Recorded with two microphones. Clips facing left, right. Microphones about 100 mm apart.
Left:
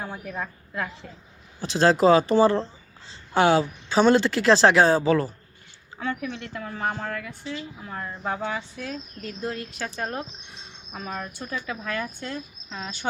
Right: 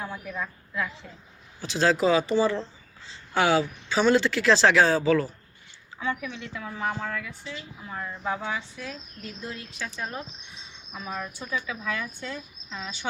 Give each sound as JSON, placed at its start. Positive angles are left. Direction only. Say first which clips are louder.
{"t": 0.0, "sound": "a woman's voice", "louder": "left 1 dB", "side_deg": 45}
{"t": 1.6, "sound": "speech", "louder": "left 3 dB", "side_deg": 25}
{"t": 2.0, "sound": "speech", "louder": "left 7 dB", "side_deg": 35}
{"t": 2.3, "sound": "a woman's voice", "louder": "left 5 dB", "side_deg": 50}
{"t": 3.5, "sound": "speech", "louder": "left 3 dB", "side_deg": 30}
{"t": 6.0, "sound": "a woman's voice", "louder": "left 1 dB", "side_deg": 55}